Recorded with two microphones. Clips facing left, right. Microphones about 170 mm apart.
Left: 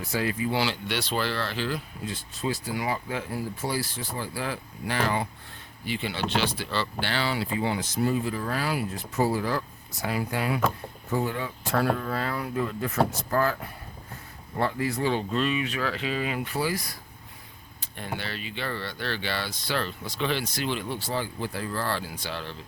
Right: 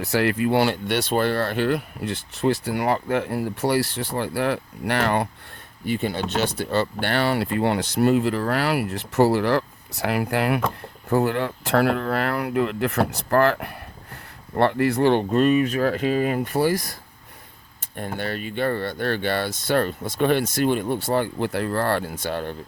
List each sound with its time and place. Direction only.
0.0 s speech: 70° right (ahead or behind)
5.8 s speech: 50° right (ahead or behind)
17.9 s speech: 50° right (ahead or behind)